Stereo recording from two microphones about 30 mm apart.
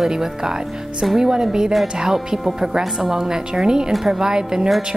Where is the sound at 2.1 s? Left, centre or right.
Centre.